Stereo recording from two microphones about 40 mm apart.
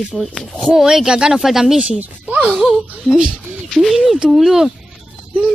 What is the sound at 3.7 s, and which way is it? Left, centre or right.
Speech, centre.